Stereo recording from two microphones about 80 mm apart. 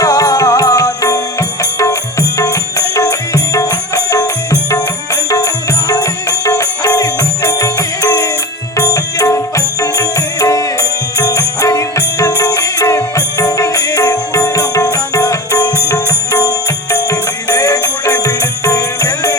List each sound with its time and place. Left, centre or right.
0.0 s music: left